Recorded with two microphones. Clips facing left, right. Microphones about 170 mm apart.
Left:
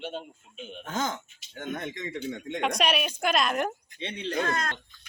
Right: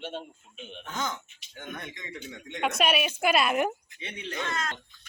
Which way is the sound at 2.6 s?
5° right (ahead or behind).